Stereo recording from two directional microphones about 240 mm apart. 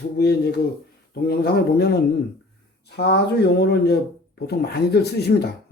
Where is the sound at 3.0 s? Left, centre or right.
Left.